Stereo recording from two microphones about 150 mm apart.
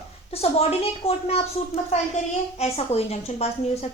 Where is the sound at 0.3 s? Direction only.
45° left (ahead or behind).